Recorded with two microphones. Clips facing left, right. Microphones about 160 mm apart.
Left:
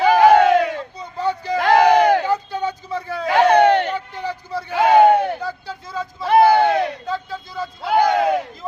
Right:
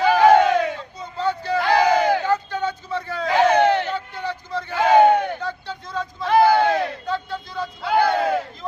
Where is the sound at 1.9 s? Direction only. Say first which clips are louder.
Left 4 dB; 60° left (ahead or behind).